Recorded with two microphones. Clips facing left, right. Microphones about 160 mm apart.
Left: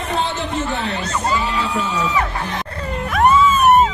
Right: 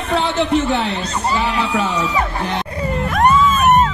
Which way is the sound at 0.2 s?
75° right (ahead or behind).